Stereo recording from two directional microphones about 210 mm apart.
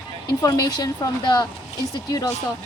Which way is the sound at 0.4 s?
15° left (ahead or behind).